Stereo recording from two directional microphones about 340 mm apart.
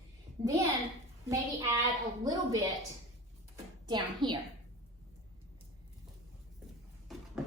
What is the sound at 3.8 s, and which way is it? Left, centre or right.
Speech, centre.